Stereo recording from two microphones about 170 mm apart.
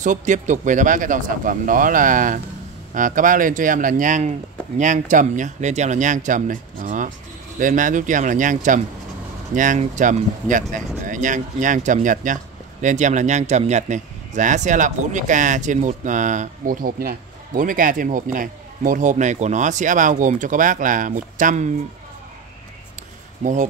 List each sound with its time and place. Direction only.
0.0 s speech: 45° right (ahead or behind)
23.4 s speech: 45° right (ahead or behind)